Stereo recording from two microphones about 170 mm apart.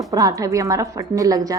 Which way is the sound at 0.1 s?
20° right (ahead or behind).